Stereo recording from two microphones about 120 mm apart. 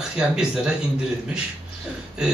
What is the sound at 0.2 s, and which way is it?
Speech, 5° right (ahead or behind).